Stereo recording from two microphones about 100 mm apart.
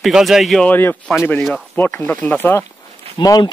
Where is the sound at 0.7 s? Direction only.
20° left (ahead or behind).